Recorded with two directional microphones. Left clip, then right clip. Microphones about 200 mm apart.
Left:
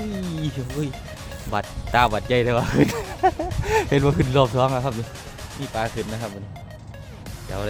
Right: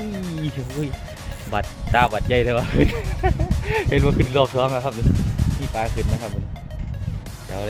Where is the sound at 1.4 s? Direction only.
Centre (ahead or behind).